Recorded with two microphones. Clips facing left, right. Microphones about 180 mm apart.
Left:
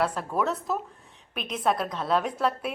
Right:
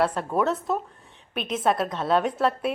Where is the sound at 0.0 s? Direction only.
Centre (ahead or behind).